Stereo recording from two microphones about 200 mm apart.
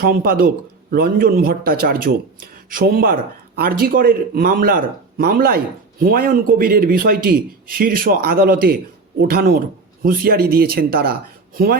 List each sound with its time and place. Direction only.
0.0 s a man's voice: 50° right (ahead or behind)